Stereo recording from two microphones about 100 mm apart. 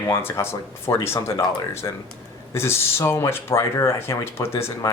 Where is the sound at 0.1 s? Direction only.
25° left (ahead or behind).